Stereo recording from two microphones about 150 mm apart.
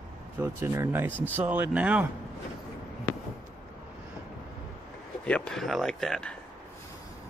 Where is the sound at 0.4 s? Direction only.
20° right (ahead or behind).